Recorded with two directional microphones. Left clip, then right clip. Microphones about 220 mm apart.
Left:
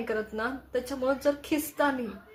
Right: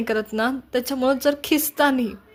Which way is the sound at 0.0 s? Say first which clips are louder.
Right 8 dB; 45° right (ahead or behind).